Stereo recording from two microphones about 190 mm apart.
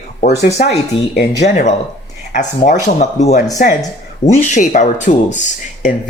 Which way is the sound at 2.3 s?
40° left (ahead or behind).